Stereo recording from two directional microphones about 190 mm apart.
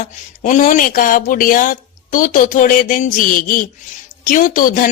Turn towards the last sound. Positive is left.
turn(degrees=45)  # may be behind; listen again after turning